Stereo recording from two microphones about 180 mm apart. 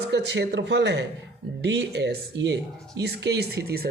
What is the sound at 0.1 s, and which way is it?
Speech, 75° right (ahead or behind).